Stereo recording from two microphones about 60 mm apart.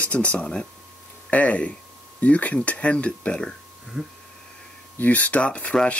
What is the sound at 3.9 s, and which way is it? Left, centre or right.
Speech, centre.